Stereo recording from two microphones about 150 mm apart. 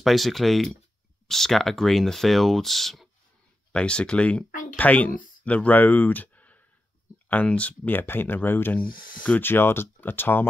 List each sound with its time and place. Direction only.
0.0 s speech: centre (ahead or behind)
4.5 s speech: 65° left (ahead or behind)
4.7 s speech: 10° left (ahead or behind)
8.8 s speech: 70° left (ahead or behind)
9.2 s speech: 10° left (ahead or behind)